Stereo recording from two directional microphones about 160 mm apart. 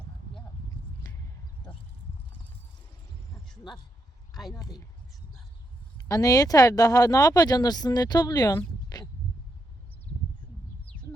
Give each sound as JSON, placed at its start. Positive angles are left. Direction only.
{"t": 4.4, "sound": "speech", "side_deg": 0}
{"t": 6.1, "sound": "speech", "side_deg": 20}
{"t": 8.9, "sound": "a sound", "side_deg": 25}